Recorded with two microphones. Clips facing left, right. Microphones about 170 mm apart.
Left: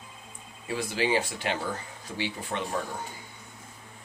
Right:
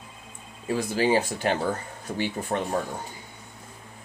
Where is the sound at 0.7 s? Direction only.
45° right (ahead or behind).